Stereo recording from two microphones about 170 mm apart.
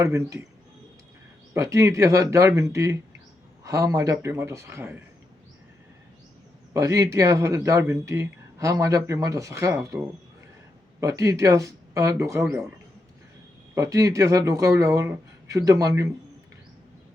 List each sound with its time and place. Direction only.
0.0 s speech: 20° right (ahead or behind)
1.5 s speech: 20° right (ahead or behind)
6.7 s speech: 20° right (ahead or behind)
11.0 s speech: 20° right (ahead or behind)
13.7 s speech: 20° right (ahead or behind)